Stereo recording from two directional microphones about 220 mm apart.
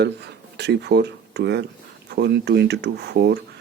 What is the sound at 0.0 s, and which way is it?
Speech, 50° right (ahead or behind).